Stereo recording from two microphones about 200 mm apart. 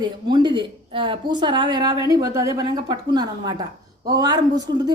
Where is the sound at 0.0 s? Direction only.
20° right (ahead or behind).